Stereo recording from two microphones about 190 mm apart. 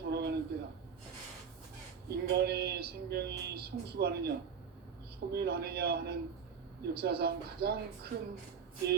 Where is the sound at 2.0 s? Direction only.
60° right (ahead or behind).